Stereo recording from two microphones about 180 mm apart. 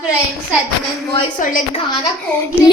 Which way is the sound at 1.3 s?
50° left (ahead or behind).